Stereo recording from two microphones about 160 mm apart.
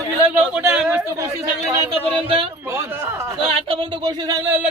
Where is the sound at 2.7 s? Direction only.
15° right (ahead or behind).